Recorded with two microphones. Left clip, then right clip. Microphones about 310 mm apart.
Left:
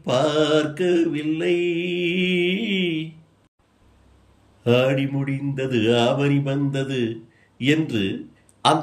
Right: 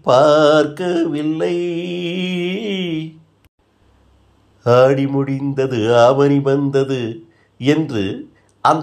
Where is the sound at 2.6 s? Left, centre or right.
Centre.